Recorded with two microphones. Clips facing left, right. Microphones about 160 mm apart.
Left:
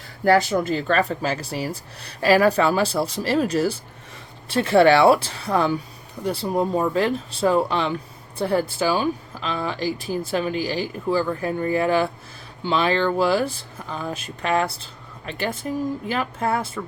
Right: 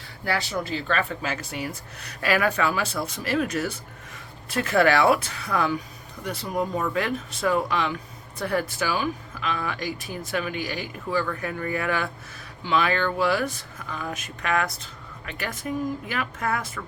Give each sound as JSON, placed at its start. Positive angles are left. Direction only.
{"t": 0.3, "sound": "speech", "side_deg": 45}